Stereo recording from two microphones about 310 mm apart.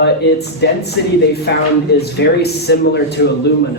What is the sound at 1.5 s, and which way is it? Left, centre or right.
A man's voice, left.